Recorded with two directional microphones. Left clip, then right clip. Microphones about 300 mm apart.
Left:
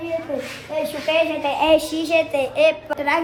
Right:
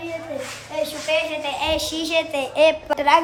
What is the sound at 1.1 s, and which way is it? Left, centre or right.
A child's voice, centre.